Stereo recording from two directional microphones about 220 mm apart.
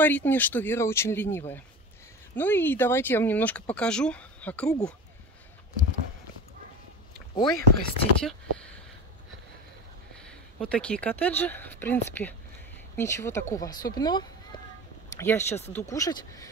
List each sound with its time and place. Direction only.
0.0 s speech: 10° left (ahead or behind)
7.3 s speech: 20° left (ahead or behind)
8.2 s speech: 5° left (ahead or behind)
10.2 s speech: 5° left (ahead or behind)